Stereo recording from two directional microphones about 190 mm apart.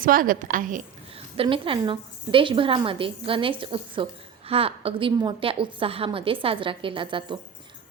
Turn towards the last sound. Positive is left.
turn(degrees=-25)  # may be behind; listen again after turning